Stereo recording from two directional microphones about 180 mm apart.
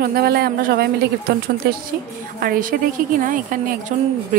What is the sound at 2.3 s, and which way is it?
A woman's voice, 50° right (ahead or behind).